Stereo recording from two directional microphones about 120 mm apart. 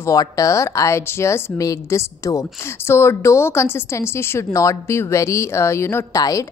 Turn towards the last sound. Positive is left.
turn(degrees=30)  # may be behind; listen again after turning